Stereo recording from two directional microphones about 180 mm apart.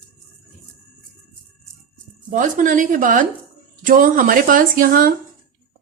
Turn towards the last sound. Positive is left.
turn(degrees=-55)  # may be behind; listen again after turning